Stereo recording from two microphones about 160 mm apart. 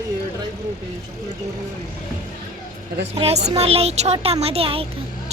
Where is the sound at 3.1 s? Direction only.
40° right (ahead or behind).